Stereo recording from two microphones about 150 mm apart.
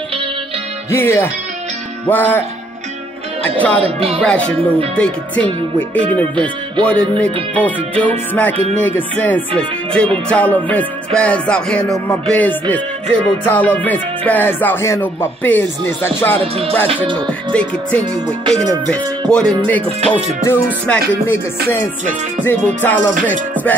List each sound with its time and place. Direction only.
0.8 s music: 15° left (ahead or behind)
3.4 s music: 10° left (ahead or behind)
3.8 s speech: 40° right (ahead or behind)
4.2 s music: 5° left (ahead or behind)
16.8 s speech: 35° right (ahead or behind)
17.3 s music: 10° left (ahead or behind)
22.4 s music: 15° left (ahead or behind)